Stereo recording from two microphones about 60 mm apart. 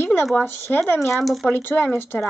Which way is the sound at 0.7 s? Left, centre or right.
Left.